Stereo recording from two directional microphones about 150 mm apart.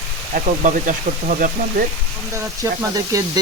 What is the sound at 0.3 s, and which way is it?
Speech, 60° right (ahead or behind).